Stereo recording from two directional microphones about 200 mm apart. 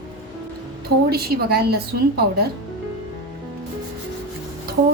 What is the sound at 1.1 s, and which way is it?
Speech, 50° right (ahead or behind).